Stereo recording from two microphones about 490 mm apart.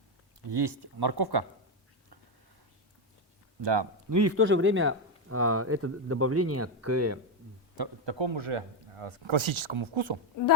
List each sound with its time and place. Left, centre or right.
0.5 s speech: right
3.6 s speech: right
4.1 s speech: right
7.8 s a man's voice: right